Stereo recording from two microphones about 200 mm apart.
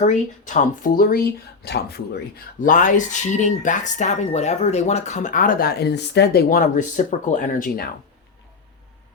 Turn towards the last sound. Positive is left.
turn(degrees=45)  # may be behind; listen again after turning